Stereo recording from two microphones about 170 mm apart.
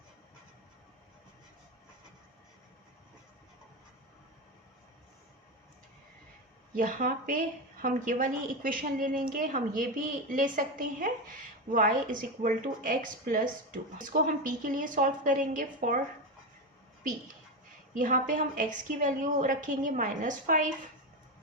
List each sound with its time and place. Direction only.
6.7 s a woman's voice: 50° right (ahead or behind)
17.9 s a woman's voice: 50° right (ahead or behind)